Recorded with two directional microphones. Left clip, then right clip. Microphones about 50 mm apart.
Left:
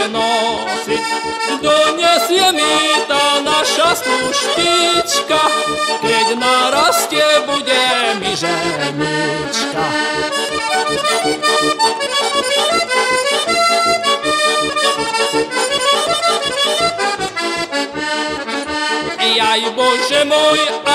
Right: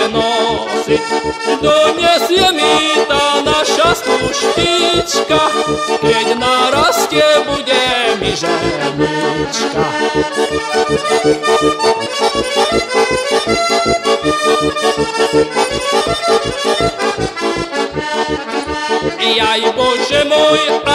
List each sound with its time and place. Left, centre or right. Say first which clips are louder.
0.2 s accordion: left 1 dB; centre
2.0 s music: right 1 dB; centre
10.8 s accordion: right 5 dB; left
19.2 s music: right 1 dB; centre